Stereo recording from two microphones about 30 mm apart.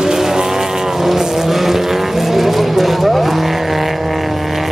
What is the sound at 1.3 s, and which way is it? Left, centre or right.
Vehicle, centre.